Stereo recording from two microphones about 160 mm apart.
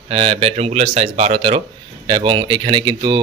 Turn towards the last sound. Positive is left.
turn(degrees=-30)  # may be behind; listen again after turning